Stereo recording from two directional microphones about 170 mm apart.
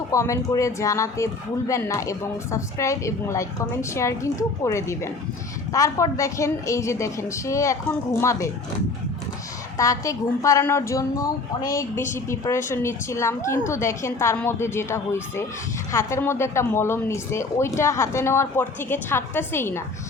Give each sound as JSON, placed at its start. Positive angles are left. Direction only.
{"t": 0.1, "sound": "speech", "side_deg": 20}
{"t": 9.7, "sound": "a woman's voice", "side_deg": 20}